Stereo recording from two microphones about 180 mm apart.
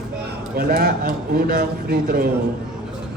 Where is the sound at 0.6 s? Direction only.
55° right (ahead or behind).